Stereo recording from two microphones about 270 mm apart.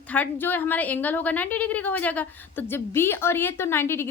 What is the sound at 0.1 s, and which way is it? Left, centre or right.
A woman's voice, centre.